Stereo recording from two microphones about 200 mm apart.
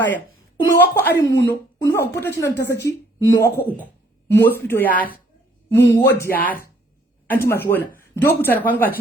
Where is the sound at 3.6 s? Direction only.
50° left (ahead or behind).